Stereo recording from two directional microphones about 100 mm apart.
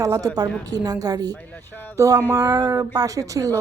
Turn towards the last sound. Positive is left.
turn(degrees=-35)  # may be behind; listen again after turning